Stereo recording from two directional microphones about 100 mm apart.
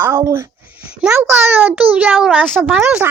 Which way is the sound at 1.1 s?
20° right (ahead or behind).